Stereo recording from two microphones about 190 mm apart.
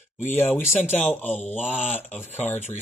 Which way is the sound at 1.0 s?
10° left (ahead or behind).